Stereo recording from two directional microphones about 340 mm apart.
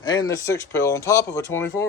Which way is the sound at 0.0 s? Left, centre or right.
Centre.